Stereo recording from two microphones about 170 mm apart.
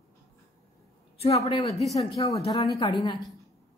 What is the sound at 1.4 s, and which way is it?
Speech, 35° left (ahead or behind).